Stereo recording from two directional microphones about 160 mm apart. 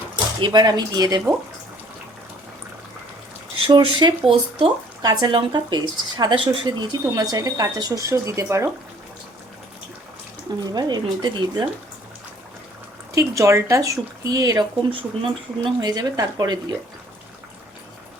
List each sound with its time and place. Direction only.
0.3 s speech: 25° right (ahead or behind)
3.7 s speech: 25° right (ahead or behind)
10.7 s speech: 25° right (ahead or behind)
13.1 s speech: 20° right (ahead or behind)